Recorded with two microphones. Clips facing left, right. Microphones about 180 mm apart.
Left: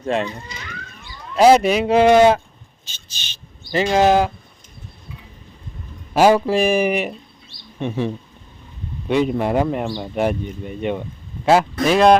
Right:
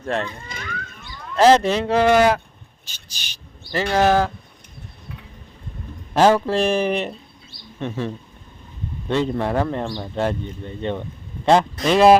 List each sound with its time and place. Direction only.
0.0 s speech: 15° left (ahead or behind)
0.4 s livestock: 55° right (ahead or behind)
1.0 s speech: 10° left (ahead or behind)
2.8 s a sound: 20° left (ahead or behind)
3.7 s speech: 15° left (ahead or behind)
6.1 s speech: 10° left (ahead or behind)
11.9 s speech: centre (ahead or behind)